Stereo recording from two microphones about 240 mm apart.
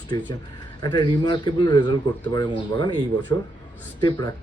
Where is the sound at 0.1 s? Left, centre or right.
Centre.